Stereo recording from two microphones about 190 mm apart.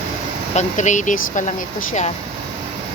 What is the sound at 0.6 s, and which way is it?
Speech, 40° left (ahead or behind).